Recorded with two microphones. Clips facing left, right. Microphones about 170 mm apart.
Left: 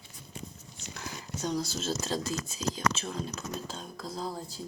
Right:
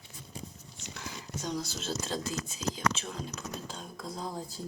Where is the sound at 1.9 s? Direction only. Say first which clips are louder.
Left 2 dB; 10° left (ahead or behind).